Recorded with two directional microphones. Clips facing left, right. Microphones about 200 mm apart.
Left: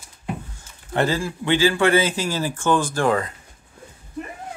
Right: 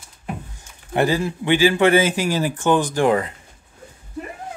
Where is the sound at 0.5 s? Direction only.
15° right (ahead or behind).